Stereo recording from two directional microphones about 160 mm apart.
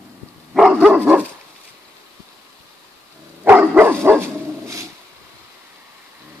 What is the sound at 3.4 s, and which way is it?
Dog, 10° right (ahead or behind).